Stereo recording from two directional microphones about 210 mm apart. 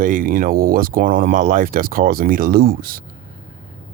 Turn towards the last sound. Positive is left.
turn(degrees=-45)  # may be behind; listen again after turning